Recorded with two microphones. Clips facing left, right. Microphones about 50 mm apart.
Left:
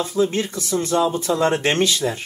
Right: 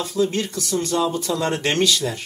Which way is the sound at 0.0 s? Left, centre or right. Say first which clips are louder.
Left 2 dB; left.